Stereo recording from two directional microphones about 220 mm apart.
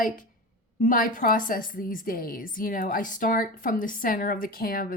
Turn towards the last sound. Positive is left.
turn(degrees=40)  # may be behind; listen again after turning